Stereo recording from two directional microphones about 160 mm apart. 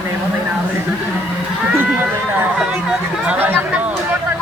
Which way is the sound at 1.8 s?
10° right (ahead or behind).